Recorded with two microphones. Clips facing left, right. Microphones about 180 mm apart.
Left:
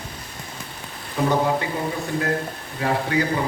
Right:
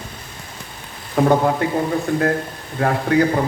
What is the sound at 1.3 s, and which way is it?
Speech, 50° right (ahead or behind).